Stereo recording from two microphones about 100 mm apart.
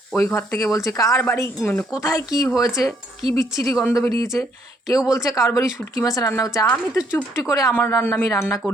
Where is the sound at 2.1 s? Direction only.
35° left (ahead or behind).